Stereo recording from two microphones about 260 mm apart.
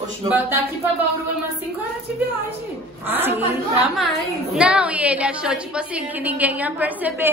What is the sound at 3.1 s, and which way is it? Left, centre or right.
A woman's voice, centre.